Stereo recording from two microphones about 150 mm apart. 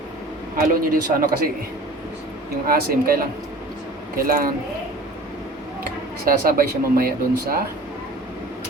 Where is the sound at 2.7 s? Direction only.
80° right.